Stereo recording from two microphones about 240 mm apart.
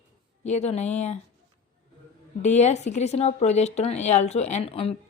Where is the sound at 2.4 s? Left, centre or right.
Left.